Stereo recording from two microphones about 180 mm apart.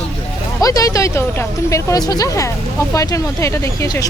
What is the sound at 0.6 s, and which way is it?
Speech, 20° left (ahead or behind).